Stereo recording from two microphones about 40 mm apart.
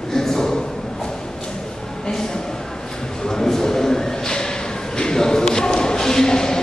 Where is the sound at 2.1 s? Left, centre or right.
Centre.